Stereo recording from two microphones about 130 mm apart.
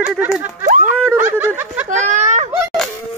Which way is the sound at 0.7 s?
80° right.